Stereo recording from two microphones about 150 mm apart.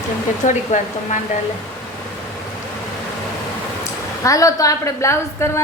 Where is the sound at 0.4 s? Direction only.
60° left (ahead or behind).